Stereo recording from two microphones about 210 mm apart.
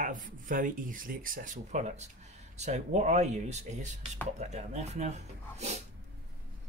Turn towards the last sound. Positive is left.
turn(degrees=-30)  # may be behind; listen again after turning